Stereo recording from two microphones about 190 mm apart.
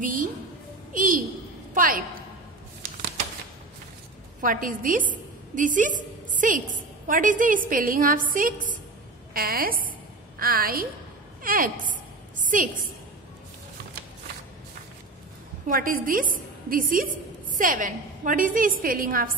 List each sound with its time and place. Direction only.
0.0 s a woman's voice: 45° right (ahead or behind)
4.4 s a woman's voice: 45° right (ahead or behind)
11.8 s a sound: 45° right (ahead or behind)
15.6 s a woman's voice: 45° right (ahead or behind)